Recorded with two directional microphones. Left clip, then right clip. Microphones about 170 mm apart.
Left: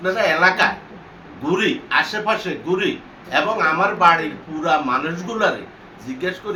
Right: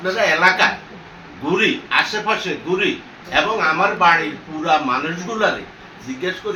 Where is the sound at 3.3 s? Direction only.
15° left (ahead or behind).